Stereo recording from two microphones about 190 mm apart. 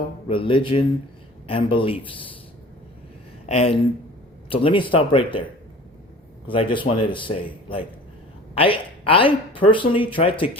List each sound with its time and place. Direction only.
0.3 s speech: 30° left (ahead or behind)
3.4 s speech: 35° left (ahead or behind)
6.5 s speech: 25° left (ahead or behind)